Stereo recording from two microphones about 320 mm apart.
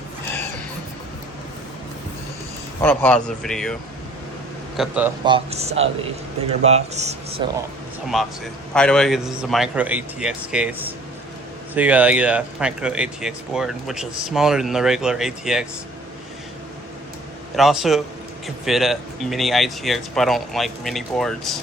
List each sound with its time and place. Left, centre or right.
2.8 s speech: centre
4.8 s a man's voice: centre; by 7.4 s right
8.0 s speech: centre
17.6 s speech: centre